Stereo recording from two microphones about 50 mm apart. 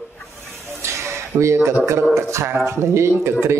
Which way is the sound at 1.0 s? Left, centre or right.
Right.